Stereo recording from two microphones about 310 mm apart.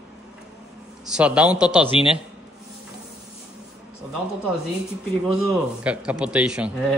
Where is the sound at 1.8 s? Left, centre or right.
Centre.